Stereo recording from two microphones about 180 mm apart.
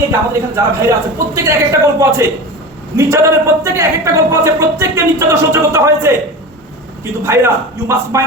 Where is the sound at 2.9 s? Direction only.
15° right (ahead or behind).